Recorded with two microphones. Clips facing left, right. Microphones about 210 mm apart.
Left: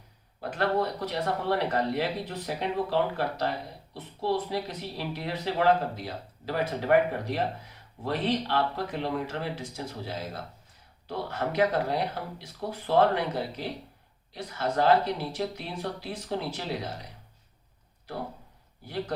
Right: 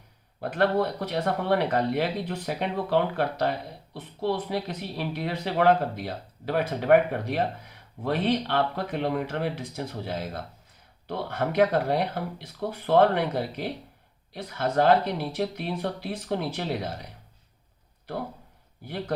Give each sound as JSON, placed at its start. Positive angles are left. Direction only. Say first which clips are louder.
{"t": 0.5, "sound": "speech", "louder": "right 3 dB", "side_deg": -55}